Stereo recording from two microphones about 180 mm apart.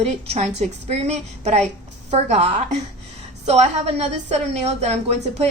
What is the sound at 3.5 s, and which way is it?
Speech, 35° right (ahead or behind).